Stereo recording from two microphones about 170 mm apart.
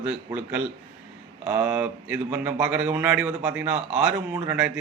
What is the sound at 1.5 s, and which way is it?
Speech, 10° right (ahead or behind).